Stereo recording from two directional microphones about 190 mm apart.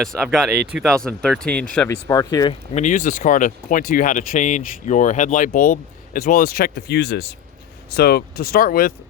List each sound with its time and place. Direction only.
0.0 s speech: centre (ahead or behind)
2.0 s speech: 20° left (ahead or behind)
2.7 s speech: 40° left (ahead or behind)